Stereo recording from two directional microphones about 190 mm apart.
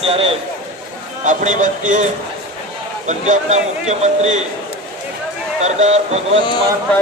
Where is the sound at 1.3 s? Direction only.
40° right (ahead or behind).